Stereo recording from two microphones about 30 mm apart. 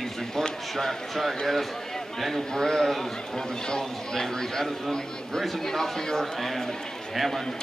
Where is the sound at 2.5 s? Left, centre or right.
Centre.